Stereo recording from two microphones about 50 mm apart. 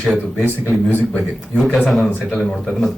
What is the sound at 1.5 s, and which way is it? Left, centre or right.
Speech, centre.